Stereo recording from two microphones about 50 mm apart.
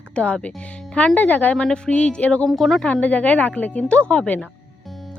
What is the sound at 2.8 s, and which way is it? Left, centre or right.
A woman's voice, left.